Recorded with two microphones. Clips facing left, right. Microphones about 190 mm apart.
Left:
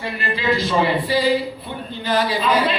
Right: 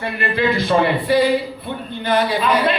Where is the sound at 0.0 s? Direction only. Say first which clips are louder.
Right 4 dB; 55° right (ahead or behind).